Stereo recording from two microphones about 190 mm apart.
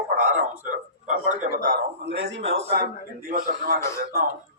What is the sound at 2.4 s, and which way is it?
Speech, 30° right (ahead or behind).